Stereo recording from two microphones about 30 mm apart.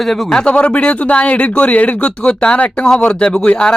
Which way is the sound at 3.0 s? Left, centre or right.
Left.